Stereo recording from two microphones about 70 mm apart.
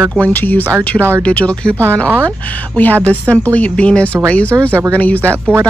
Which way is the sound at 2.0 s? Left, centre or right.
Right.